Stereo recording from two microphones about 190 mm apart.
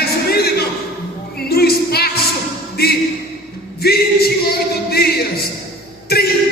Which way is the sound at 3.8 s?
55° left (ahead or behind).